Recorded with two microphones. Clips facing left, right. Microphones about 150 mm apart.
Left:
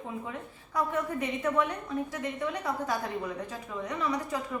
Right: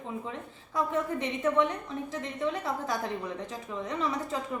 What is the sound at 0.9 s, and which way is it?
Speech, 25° right (ahead or behind).